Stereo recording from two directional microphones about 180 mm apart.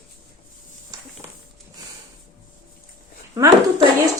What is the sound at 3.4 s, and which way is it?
Child singing, 20° right (ahead or behind).